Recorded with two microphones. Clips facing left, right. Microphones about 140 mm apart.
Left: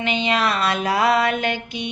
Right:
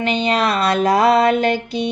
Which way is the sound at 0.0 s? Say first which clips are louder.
Right 3 dB; 40° right (ahead or behind).